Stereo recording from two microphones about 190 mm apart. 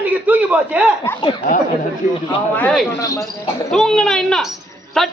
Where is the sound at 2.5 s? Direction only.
10° left (ahead or behind).